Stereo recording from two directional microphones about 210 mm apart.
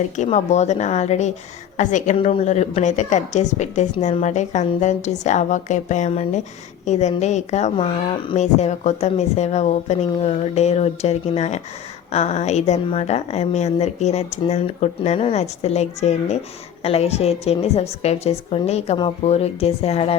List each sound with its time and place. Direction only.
0.2 s a woman's voice: 35° left (ahead or behind)